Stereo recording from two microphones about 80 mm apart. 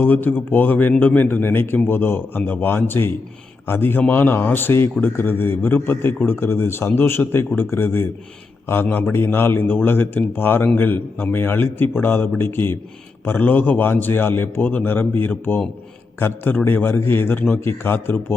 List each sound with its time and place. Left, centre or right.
0.0 s speech: left